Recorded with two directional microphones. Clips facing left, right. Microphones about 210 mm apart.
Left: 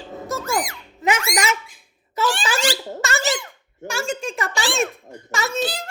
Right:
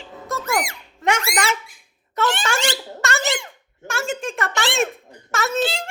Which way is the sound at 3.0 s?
Centre (ahead or behind).